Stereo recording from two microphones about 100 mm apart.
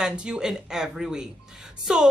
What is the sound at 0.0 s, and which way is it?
A woman's voice, 10° right (ahead or behind).